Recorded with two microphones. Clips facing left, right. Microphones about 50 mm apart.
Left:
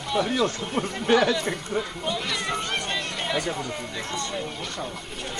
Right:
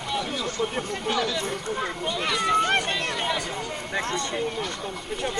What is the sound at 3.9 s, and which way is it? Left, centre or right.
Speech, right.